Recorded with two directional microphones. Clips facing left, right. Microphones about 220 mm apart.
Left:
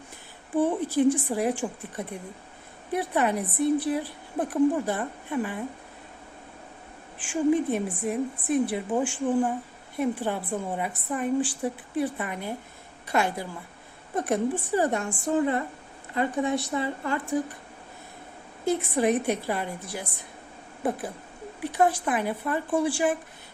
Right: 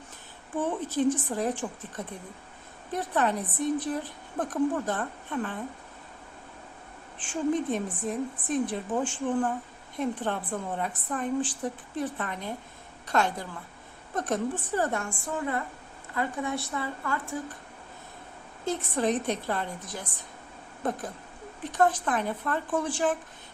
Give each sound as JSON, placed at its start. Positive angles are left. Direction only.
{"t": 0.6, "sound": "a woman's voice", "side_deg": 10}
{"t": 2.9, "sound": "a woman's voice", "side_deg": 10}
{"t": 7.2, "sound": "a woman's voice", "side_deg": 10}
{"t": 18.6, "sound": "a woman's voice", "side_deg": 10}